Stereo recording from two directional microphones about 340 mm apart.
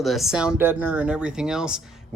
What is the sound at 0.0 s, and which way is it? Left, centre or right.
Speech, centre.